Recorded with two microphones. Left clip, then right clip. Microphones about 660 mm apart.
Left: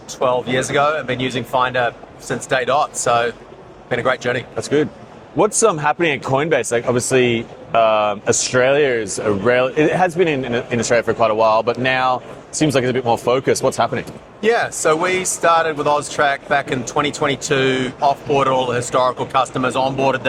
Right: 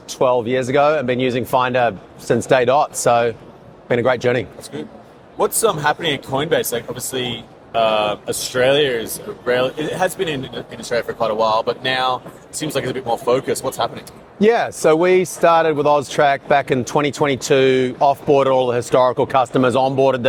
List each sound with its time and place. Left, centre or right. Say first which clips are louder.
0.1 s speech: right 1 dB; right
5.4 s speech: left 2 dB; left
14.4 s speech: right 2 dB; right